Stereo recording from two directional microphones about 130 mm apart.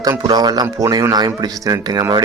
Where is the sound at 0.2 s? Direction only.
30° right (ahead or behind).